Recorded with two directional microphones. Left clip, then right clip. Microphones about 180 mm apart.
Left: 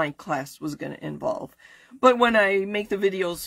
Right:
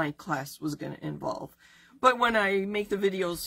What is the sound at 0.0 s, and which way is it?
Speech, 40° left (ahead or behind).